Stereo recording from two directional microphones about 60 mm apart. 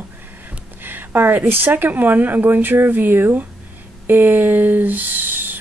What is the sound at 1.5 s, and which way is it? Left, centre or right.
Speech, right.